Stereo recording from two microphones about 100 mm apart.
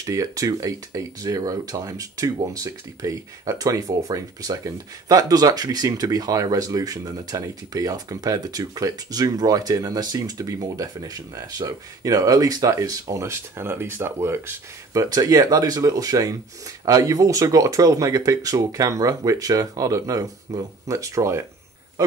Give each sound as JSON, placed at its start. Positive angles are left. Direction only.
{"t": 0.0, "sound": "speech", "side_deg": -35}
{"t": 15.0, "sound": "speech", "side_deg": -40}